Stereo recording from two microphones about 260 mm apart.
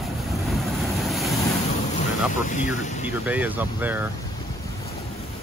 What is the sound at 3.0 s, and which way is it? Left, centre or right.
Speech, centre.